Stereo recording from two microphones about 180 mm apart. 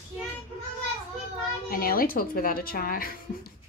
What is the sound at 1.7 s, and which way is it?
A woman's voice, 55° left (ahead or behind).